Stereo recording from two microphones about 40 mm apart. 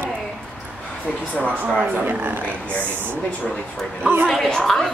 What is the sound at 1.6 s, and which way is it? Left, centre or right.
Speech, right.